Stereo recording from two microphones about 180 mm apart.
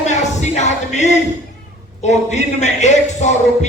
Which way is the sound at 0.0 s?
40° left (ahead or behind).